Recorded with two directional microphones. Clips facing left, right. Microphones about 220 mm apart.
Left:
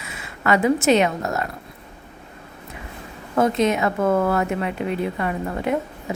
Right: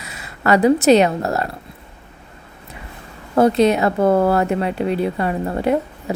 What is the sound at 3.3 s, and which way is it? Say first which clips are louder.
A woman's voice: right 5 dB; 35° right (ahead or behind).